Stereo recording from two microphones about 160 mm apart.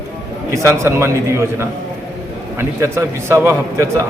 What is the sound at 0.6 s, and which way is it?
A man's voice, 15° right (ahead or behind).